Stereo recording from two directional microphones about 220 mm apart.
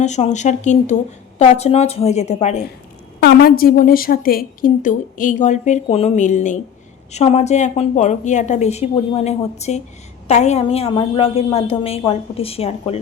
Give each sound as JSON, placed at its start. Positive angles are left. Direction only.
{"t": 0.0, "sound": "a woman's voice", "side_deg": 30}
{"t": 3.2, "sound": "a woman's voice", "side_deg": 45}